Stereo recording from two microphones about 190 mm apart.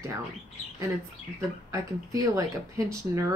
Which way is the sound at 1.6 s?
20° right (ahead or behind).